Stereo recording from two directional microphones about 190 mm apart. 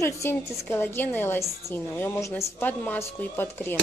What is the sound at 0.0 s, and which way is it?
Speech, 15° left (ahead or behind).